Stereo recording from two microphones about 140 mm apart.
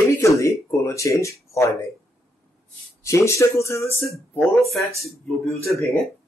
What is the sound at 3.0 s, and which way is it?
Speech, 20° left (ahead or behind).